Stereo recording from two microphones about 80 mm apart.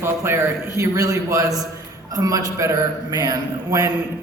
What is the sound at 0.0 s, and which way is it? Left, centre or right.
A man's voice, right.